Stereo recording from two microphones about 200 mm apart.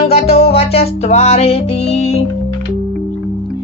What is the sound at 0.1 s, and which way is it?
Music, 30° left (ahead or behind).